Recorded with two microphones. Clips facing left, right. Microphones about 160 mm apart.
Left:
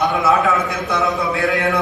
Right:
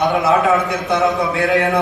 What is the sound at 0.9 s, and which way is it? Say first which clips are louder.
Speech: right 3 dB; 20° right (ahead or behind).